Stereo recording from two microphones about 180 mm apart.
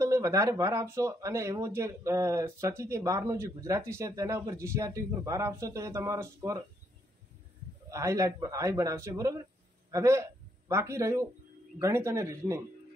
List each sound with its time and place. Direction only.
0.0 s speech: 15° right (ahead or behind)
7.9 s a man's voice: 15° right (ahead or behind)